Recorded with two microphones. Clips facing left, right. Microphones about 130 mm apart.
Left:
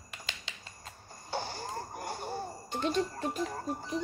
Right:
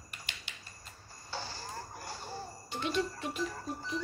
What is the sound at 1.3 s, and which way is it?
Music, 55° left (ahead or behind).